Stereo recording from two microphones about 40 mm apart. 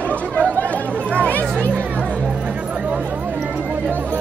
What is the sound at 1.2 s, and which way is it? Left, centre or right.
Speech, left.